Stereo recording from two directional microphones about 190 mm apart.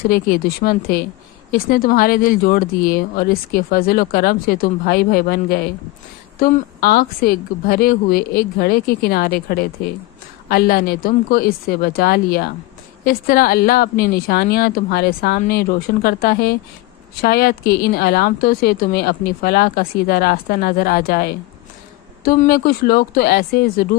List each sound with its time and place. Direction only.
0.1 s speech: 50° left (ahead or behind)